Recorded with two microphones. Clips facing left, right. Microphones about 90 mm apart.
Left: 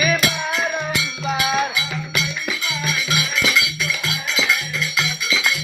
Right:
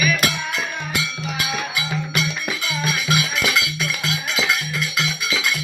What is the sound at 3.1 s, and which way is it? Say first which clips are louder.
Music: even; 45° right (ahead or behind).